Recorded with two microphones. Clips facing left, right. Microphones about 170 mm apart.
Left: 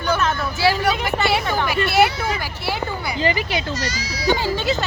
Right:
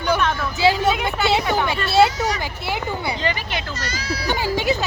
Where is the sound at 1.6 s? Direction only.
25° right (ahead or behind).